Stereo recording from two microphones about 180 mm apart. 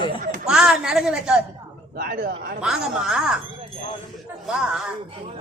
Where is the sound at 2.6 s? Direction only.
5° right (ahead or behind).